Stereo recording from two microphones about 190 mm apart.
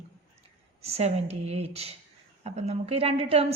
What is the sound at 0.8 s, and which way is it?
A woman's voice, 35° right (ahead or behind).